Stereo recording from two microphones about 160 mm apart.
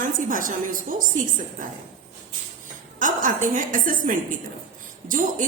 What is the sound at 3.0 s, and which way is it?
A woman's voice, 55° right (ahead or behind).